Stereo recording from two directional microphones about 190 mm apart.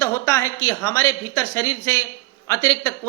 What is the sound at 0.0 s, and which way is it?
A man's voice, 15° left (ahead or behind).